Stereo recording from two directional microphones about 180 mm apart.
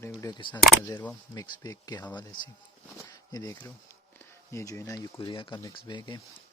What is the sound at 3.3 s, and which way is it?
Speech, 20° left (ahead or behind).